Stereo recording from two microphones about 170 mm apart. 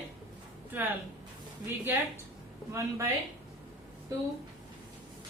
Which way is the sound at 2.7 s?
15° right (ahead or behind).